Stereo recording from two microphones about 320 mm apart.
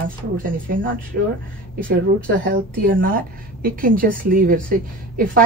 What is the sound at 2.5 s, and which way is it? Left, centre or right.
A woman's voice, right.